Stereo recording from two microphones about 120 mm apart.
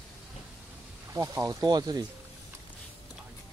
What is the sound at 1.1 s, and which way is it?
Speech, 25° right (ahead or behind).